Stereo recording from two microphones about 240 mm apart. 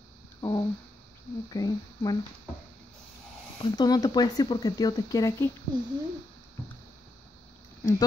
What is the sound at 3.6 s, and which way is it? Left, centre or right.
Speech, centre.